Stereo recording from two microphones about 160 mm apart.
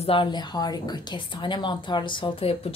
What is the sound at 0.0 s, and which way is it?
A woman's voice, 35° left (ahead or behind).